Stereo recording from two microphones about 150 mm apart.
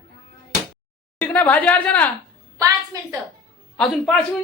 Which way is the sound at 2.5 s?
20° right (ahead or behind).